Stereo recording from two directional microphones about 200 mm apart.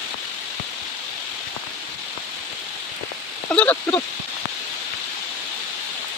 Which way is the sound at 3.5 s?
10° left (ahead or behind).